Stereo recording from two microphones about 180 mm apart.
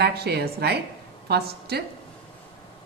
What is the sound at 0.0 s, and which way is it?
A woman's voice, 65° right (ahead or behind).